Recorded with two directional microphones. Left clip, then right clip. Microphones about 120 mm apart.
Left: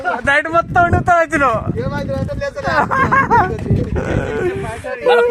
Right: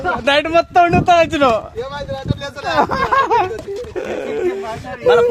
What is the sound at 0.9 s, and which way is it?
Speech, 15° left (ahead or behind).